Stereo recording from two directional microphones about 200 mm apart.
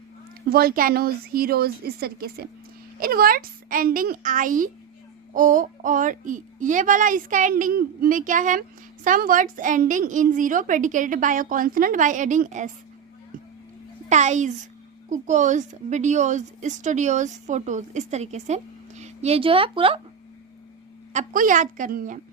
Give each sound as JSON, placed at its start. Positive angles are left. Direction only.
{"t": 0.5, "sound": "a woman's voice", "side_deg": -45}
{"t": 14.1, "sound": "a woman's voice", "side_deg": -35}
{"t": 21.1, "sound": "a woman's voice", "side_deg": -40}